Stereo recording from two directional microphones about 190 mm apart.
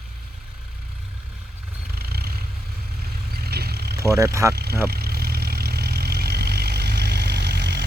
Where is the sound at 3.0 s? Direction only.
55° right (ahead or behind).